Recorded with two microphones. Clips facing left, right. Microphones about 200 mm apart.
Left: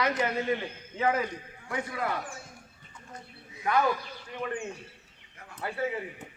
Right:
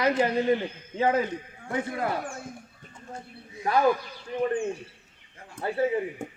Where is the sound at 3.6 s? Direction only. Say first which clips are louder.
Right 2 dB; 35° right (ahead or behind).